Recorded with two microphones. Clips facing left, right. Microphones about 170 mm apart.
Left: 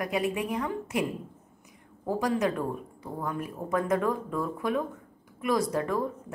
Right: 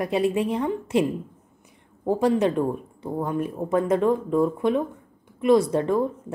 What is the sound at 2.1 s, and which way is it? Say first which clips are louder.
A woman's voice: right 6 dB; 30° right (ahead or behind).